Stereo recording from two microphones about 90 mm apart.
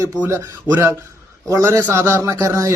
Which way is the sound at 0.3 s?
25° right (ahead or behind).